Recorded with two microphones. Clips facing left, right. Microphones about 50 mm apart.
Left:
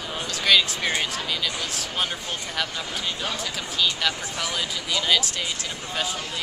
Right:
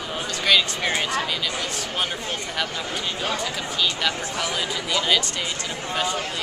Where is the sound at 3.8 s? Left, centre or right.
Centre.